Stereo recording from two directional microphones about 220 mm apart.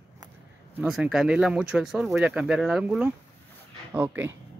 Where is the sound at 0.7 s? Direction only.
5° right (ahead or behind).